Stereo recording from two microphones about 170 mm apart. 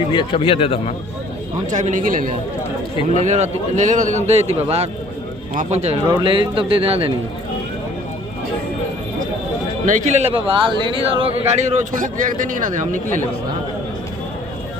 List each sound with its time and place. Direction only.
0.1 s a man's voice: 30° left (ahead or behind)
1.7 s speech: 45° right (ahead or behind)
2.9 s a man's voice: 40° left (ahead or behind)
3.2 s a man's voice: 45° right (ahead or behind)
6.1 s a man's voice: 30° right (ahead or behind)
9.8 s speech: 45° right (ahead or behind)